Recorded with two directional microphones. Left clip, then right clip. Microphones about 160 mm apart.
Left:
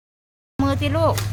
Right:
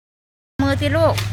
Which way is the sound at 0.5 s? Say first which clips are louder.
Right 3 dB; 10° left (ahead or behind).